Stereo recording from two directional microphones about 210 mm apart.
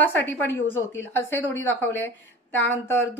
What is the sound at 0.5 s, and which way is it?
Speech, 65° left (ahead or behind).